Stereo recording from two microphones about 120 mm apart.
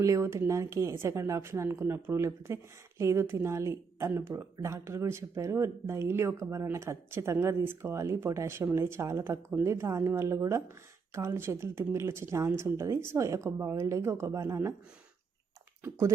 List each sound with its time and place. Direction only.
0.0 s speech: 25° right (ahead or behind)
15.8 s speech: 25° right (ahead or behind)